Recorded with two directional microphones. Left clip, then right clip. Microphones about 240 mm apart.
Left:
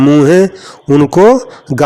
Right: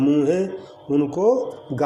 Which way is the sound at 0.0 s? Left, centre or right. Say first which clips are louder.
Left 12 dB; left.